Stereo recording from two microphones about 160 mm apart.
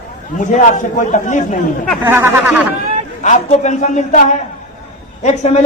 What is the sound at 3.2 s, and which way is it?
A man's voice, 50° left (ahead or behind).